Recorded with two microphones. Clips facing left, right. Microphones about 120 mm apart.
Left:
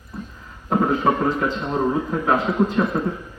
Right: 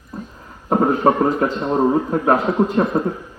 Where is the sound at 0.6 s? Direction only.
40° right (ahead or behind).